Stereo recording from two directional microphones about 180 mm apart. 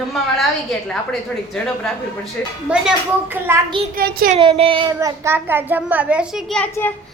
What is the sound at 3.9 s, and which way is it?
Child singing, 55° right (ahead or behind).